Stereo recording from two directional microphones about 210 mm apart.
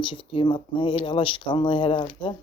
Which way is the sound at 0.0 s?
25° left (ahead or behind).